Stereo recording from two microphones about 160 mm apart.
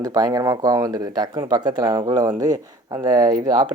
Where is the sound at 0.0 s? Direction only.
25° right (ahead or behind).